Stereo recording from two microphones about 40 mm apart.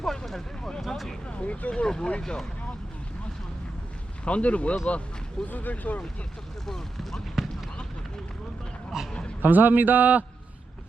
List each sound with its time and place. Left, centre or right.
0.0 s a sound: centre
1.3 s vehicle: left
1.7 s speech: centre
4.3 s speech: left
5.5 s speech: left
6.7 s speech: centre
7.4 s a sound: centre
8.9 s a man's voice: centre
9.4 s speech: right